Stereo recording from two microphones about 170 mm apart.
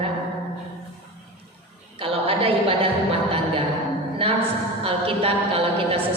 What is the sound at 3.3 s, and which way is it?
Music, 35° right (ahead or behind).